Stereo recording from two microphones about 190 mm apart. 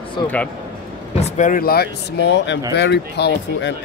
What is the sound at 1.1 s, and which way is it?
Speech, 35° left (ahead or behind).